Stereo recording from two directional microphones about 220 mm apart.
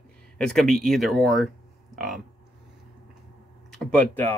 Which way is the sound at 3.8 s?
10° left (ahead or behind).